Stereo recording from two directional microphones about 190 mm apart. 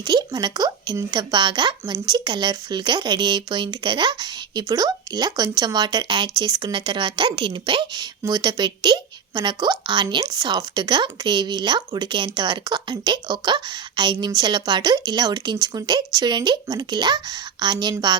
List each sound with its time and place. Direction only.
0.0 s speech: 20° right (ahead or behind)